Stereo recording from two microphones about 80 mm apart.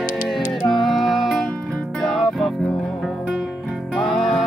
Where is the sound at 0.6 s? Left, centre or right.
Centre.